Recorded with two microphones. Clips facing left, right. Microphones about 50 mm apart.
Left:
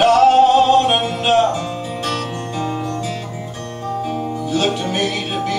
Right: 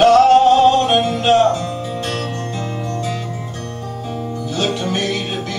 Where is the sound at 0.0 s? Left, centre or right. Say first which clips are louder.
Right 1 dB; centre.